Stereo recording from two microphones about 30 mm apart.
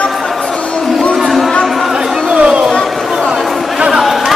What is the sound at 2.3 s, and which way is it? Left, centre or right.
Chatter, right.